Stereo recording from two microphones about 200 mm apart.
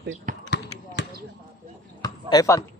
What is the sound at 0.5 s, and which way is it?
Basketball bounce, 60° left (ahead or behind).